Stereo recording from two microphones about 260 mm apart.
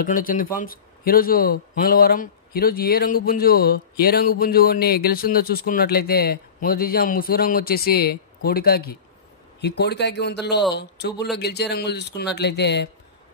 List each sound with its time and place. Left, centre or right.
0.0 s a man's voice: left